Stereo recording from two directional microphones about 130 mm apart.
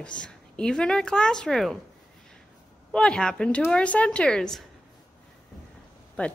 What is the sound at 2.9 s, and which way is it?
A woman's voice, 5° left (ahead or behind).